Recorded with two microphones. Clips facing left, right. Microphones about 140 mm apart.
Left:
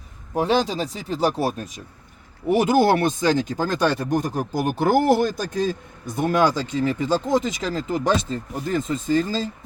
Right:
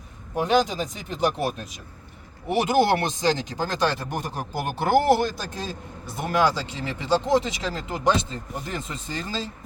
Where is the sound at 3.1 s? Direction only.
50° left (ahead or behind).